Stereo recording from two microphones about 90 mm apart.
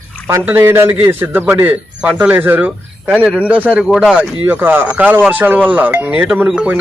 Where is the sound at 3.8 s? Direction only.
5° right (ahead or behind).